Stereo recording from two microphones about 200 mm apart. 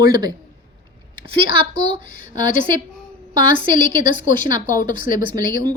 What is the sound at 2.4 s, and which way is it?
Speech, 40° left (ahead or behind).